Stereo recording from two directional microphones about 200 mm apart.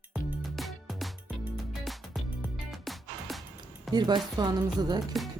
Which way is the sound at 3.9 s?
20° right (ahead or behind).